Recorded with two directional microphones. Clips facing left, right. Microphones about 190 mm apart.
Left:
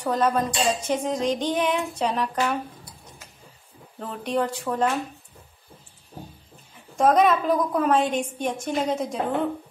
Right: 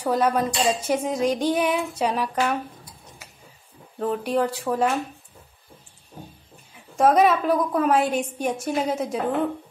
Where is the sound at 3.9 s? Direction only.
5° right (ahead or behind).